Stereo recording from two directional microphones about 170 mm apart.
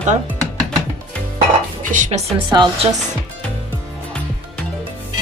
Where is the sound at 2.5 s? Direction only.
25° right (ahead or behind).